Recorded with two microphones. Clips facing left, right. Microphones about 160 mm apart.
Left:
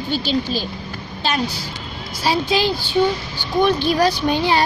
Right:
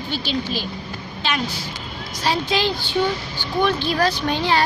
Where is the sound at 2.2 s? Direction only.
10° left (ahead or behind).